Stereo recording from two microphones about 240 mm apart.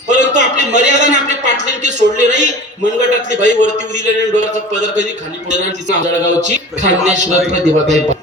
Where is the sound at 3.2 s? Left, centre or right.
Right.